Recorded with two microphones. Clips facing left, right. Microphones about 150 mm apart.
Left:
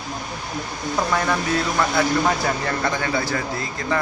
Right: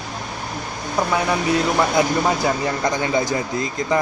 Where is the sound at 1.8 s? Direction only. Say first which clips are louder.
Right 2 dB; 15° right (ahead or behind).